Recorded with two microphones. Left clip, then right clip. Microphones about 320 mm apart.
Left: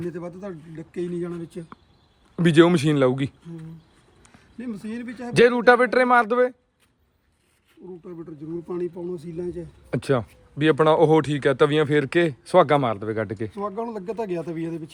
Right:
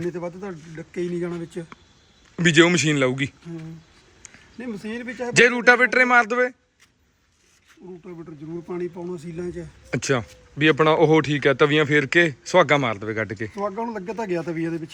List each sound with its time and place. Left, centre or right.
0.0 s speech: centre
2.3 s a man's voice: centre
4.5 s speech: centre
8.6 s speech: centre
9.9 s speech: centre